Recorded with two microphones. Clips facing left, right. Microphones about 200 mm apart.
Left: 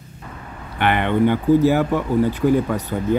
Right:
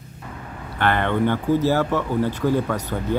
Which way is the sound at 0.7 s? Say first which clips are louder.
Left 2 dB; 15° left (ahead or behind).